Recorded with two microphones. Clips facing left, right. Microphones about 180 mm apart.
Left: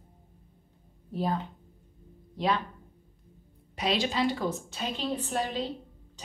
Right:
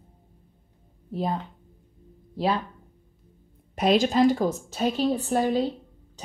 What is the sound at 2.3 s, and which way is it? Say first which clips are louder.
Speech: right 3 dB; 30° right (ahead or behind).